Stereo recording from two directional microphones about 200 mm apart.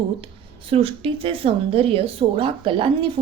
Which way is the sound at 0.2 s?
25° right (ahead or behind).